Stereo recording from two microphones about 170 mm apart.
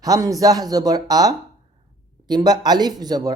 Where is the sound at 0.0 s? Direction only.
20° right (ahead or behind).